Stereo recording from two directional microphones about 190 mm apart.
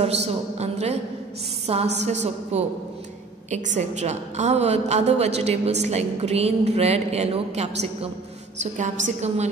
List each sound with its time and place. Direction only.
0.0 s a woman's voice: 35° right (ahead or behind)